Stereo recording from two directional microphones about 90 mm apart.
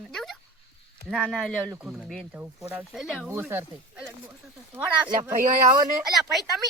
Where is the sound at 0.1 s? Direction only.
5° left (ahead or behind).